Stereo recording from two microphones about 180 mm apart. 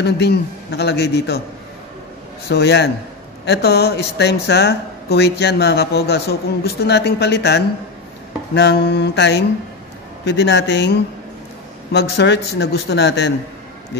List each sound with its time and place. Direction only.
0.0 s speech: 65° left (ahead or behind)
2.5 s speech: 70° left (ahead or behind)